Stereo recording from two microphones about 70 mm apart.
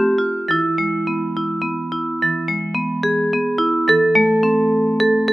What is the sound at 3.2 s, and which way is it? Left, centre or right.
Music, centre.